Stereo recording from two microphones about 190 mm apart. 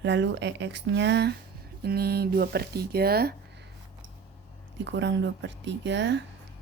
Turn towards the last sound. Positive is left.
turn(degrees=-70)  # may be behind; listen again after turning